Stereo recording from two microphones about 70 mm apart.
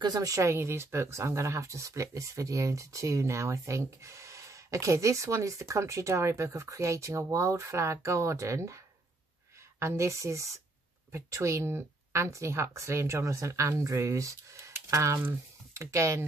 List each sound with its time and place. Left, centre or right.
0.0 s speech: right
9.8 s speech: right